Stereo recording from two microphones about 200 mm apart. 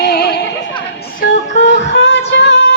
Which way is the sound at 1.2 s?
65° left (ahead or behind).